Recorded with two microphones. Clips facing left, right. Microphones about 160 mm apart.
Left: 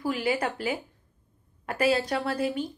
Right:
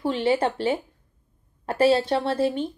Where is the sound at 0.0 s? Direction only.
25° right (ahead or behind).